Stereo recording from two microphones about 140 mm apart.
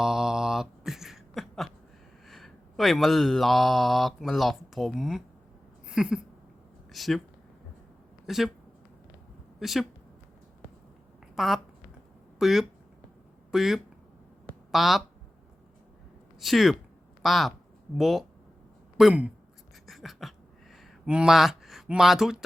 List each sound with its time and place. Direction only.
0.0 s beatboxing: 5° right (ahead or behind)
2.2 s speech: centre (ahead or behind)
8.3 s speech: centre (ahead or behind)
9.6 s speech: centre (ahead or behind)
11.3 s speech: centre (ahead or behind)
16.4 s speech: centre (ahead or behind)
19.9 s a sound: centre (ahead or behind)